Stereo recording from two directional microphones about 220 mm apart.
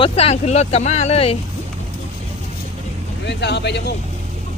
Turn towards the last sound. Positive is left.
turn(degrees=50)  # may be behind; listen again after turning